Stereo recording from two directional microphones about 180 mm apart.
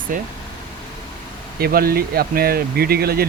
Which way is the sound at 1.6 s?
55° right (ahead or behind).